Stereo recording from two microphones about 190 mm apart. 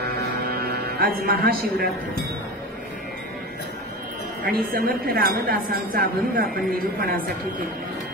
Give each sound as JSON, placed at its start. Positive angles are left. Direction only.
{"t": 0.6, "sound": "a man's voice", "side_deg": -55}
{"t": 4.5, "sound": "a woman's voice", "side_deg": -55}